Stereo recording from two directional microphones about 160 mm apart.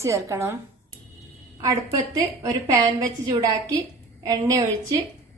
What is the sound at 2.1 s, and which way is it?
A woman's voice, 20° right (ahead or behind).